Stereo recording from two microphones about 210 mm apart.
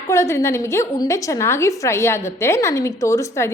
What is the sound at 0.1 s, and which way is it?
A woman's voice, 15° left (ahead or behind).